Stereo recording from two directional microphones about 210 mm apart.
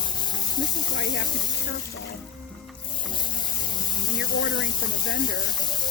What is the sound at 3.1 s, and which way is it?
Spray, 20° left (ahead or behind).